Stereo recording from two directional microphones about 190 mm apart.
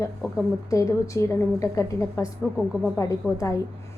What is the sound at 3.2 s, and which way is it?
Speech, 5° left (ahead or behind).